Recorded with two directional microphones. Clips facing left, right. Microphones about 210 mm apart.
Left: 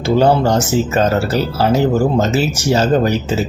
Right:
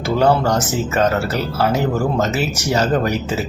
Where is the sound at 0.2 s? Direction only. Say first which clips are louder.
Left 2 dB; 30° left (ahead or behind).